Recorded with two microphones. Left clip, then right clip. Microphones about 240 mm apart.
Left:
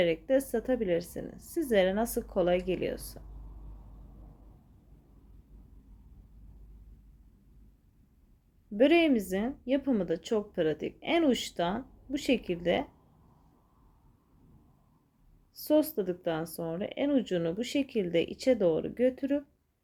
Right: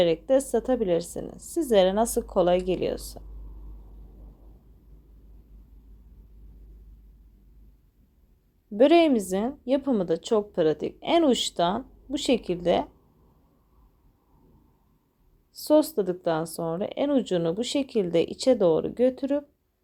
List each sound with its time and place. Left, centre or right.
0.0 s speech: centre
8.7 s speech: centre
15.5 s speech: centre